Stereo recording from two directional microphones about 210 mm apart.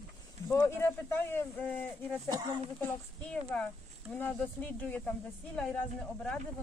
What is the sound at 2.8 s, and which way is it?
Speech, 5° left (ahead or behind).